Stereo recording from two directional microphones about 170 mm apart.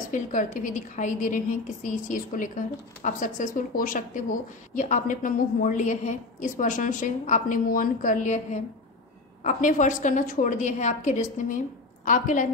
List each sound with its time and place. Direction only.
0.1 s a woman's voice: 50° left (ahead or behind)